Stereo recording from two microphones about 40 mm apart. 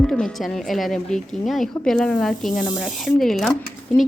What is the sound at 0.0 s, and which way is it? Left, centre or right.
Speech, centre.